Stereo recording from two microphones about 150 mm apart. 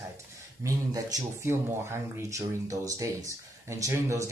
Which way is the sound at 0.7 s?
25° right (ahead or behind).